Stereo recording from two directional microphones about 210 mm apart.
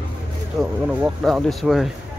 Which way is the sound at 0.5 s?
Centre (ahead or behind).